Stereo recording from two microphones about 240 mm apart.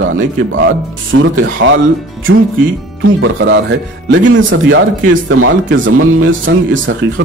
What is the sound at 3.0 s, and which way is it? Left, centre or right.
Speech, right.